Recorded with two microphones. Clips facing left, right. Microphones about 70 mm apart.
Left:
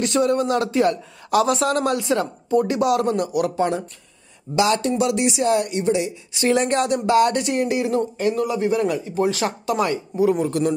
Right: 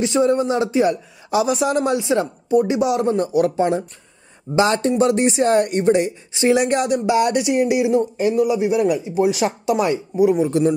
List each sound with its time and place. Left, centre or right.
0.0 s speech: centre; by 6.1 s right
6.5 s speech: centre